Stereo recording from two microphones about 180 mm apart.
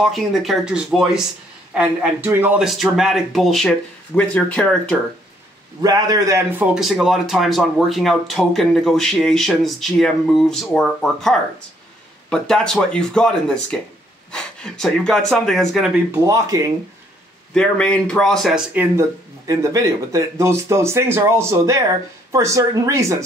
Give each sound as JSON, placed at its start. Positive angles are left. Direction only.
{"t": 0.0, "sound": "a man's voice", "side_deg": 0}
{"t": 5.8, "sound": "a man's voice", "side_deg": -20}
{"t": 17.6, "sound": "a man's voice", "side_deg": 5}
{"t": 18.7, "sound": "speech", "side_deg": -15}